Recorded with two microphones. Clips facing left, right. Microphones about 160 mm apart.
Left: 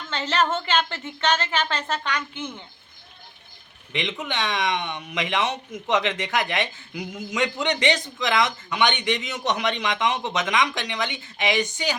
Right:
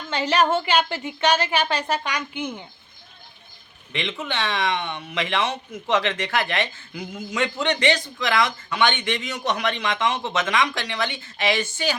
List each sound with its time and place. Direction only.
0.1 s a woman's voice: 10° right (ahead or behind)
3.9 s a man's voice: 15° left (ahead or behind)